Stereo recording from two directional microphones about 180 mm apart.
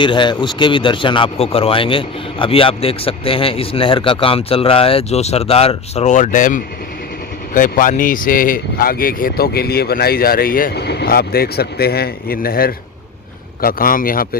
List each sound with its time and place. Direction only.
0.0 s a man's voice: 25° left (ahead or behind); by 14.3 s 50° left (ahead or behind)